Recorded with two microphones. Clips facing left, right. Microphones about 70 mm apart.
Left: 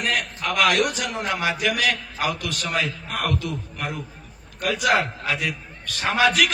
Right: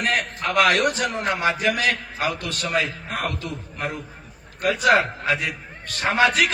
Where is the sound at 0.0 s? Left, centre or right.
Right.